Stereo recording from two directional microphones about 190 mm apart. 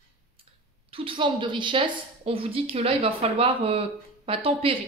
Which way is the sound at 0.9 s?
30° right (ahead or behind).